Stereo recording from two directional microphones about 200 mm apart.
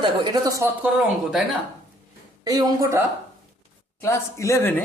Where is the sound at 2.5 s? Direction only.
20° right (ahead or behind).